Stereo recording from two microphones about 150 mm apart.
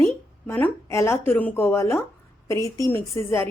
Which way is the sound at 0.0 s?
15° left (ahead or behind).